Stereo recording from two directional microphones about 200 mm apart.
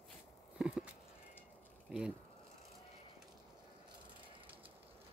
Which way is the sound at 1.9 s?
5° right (ahead or behind).